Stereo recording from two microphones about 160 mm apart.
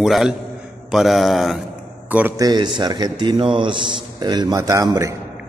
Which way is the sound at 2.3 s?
25° right (ahead or behind).